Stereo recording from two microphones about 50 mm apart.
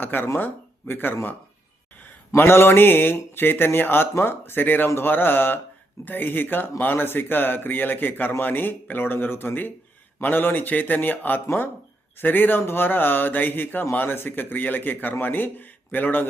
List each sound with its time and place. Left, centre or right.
0.0 s speech: left
2.3 s a man's voice: left
11.4 s a man's voice: left